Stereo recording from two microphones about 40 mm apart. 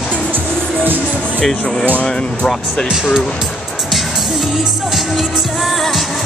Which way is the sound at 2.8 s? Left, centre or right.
Centre.